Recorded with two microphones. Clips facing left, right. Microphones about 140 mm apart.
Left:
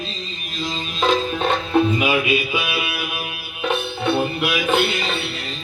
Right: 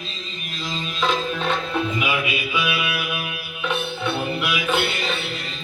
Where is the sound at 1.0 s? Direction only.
45° left (ahead or behind).